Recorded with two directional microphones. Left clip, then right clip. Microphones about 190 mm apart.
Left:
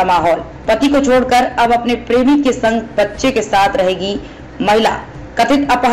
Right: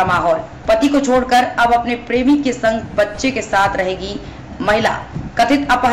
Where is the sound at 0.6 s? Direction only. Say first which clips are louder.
Left 1 dB; 10° left (ahead or behind).